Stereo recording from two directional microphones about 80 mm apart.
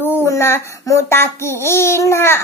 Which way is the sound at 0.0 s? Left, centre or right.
Left.